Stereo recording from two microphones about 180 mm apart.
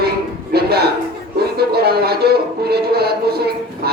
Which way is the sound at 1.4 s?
60° right (ahead or behind).